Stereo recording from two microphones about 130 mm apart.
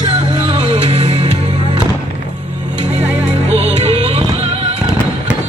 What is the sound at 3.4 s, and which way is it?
Music, 55° right (ahead or behind).